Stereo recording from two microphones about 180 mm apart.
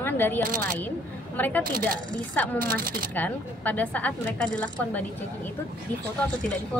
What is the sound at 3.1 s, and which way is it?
Speech, 10° left (ahead or behind).